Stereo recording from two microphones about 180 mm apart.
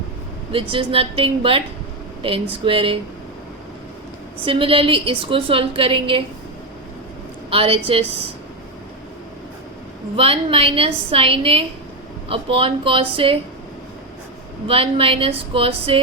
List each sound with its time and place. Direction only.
0.7 s a woman's voice: 30° right (ahead or behind)
4.4 s a woman's voice: 30° right (ahead or behind)
7.5 s a woman's voice: 30° right (ahead or behind)
10.2 s a woman's voice: 30° right (ahead or behind)
14.7 s a woman's voice: 30° right (ahead or behind)